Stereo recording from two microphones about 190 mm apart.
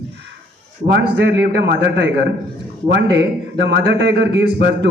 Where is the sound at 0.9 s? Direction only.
70° right (ahead or behind).